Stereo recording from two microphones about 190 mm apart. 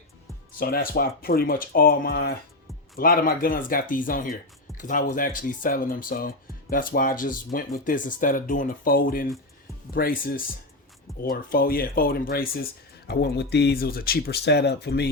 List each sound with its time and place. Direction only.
0.6 s speech: 50° left (ahead or behind)